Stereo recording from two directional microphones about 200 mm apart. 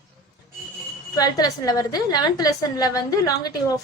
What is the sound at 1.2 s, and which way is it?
A woman's voice, 20° left (ahead or behind).